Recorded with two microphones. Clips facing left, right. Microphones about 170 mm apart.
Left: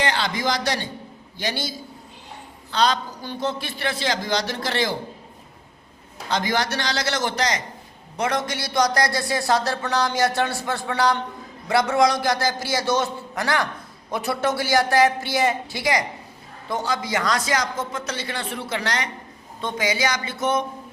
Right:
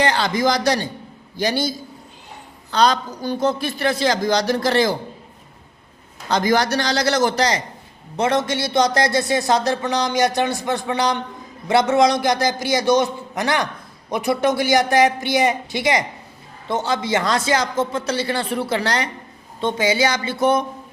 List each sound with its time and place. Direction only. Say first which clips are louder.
0.0 s a man's voice: right 5 dB; 40° right (ahead or behind)
2.7 s a man's voice: right 4 dB; 40° right (ahead or behind)
6.3 s a man's voice: right 6 dB; 40° right (ahead or behind)